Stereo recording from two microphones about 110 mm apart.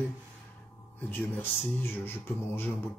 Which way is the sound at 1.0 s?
20° left (ahead or behind).